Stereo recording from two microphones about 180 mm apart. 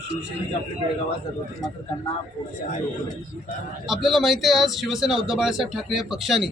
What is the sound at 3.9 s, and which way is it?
A man's voice, centre (ahead or behind).